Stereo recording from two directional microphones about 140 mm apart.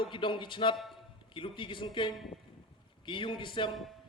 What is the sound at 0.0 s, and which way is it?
Speech, 35° left (ahead or behind).